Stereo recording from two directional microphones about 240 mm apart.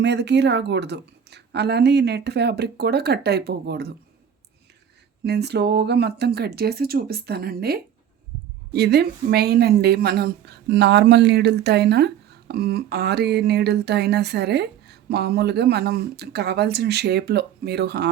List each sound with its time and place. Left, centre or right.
0.0 s speech: right
5.2 s speech: right